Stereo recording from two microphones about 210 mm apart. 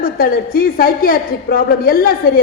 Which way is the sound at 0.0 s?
45° left (ahead or behind).